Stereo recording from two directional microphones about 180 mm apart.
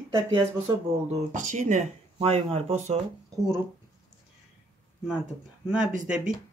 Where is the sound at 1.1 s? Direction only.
45° right (ahead or behind).